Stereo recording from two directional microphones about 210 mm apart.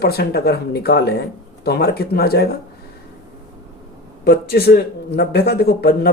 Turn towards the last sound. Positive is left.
turn(degrees=50)  # may be behind; listen again after turning